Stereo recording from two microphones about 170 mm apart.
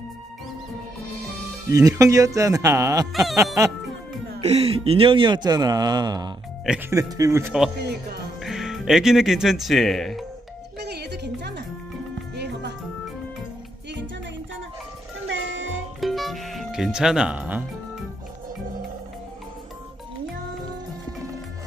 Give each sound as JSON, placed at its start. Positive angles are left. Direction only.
{"t": 1.7, "sound": "a man's voice", "side_deg": -20}
{"t": 3.1, "sound": "speech", "side_deg": 0}
{"t": 4.4, "sound": "a man's voice", "side_deg": -35}
{"t": 6.6, "sound": "speech", "side_deg": -5}
{"t": 6.9, "sound": "a man's voice", "side_deg": -20}
{"t": 8.4, "sound": "speech", "side_deg": 0}
{"t": 10.8, "sound": "music", "side_deg": -75}
{"t": 15.2, "sound": "music", "side_deg": -90}
{"t": 16.0, "sound": "music", "side_deg": 0}